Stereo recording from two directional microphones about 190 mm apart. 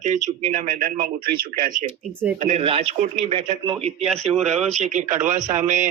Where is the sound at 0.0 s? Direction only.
40° right (ahead or behind).